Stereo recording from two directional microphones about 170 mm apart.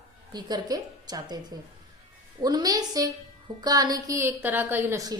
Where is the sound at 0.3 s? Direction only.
25° right (ahead or behind).